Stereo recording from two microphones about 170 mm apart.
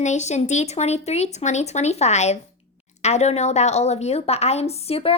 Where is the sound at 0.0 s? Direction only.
45° left (ahead or behind).